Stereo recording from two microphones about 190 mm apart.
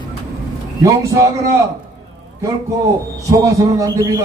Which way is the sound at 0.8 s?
15° right (ahead or behind).